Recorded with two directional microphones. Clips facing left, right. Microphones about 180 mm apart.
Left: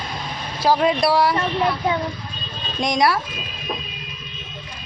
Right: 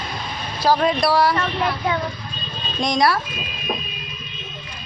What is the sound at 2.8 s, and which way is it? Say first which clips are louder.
Speech: even; 20° left (ahead or behind).